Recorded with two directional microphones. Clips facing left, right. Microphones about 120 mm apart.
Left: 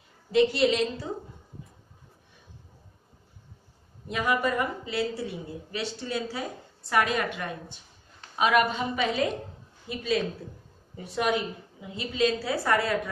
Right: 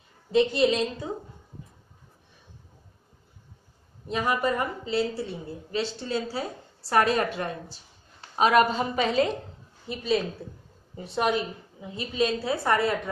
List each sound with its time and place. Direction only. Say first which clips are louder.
0.3 s speech: even; 25° right (ahead or behind)
4.1 s a woman's voice: right 1 dB; 30° right (ahead or behind)